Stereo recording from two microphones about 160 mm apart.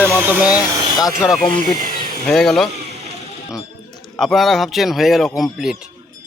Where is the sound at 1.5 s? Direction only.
60° right (ahead or behind).